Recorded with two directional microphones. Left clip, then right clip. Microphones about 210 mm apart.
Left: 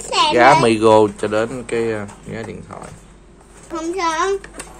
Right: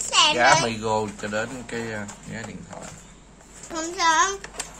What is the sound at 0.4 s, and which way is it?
Speech, 50° left (ahead or behind).